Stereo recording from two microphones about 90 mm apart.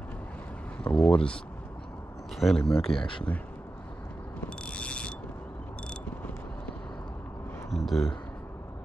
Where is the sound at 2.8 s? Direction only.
75° left (ahead or behind).